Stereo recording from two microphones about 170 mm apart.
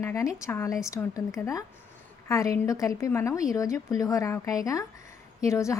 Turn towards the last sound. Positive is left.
turn(degrees=15)  # may be behind; listen again after turning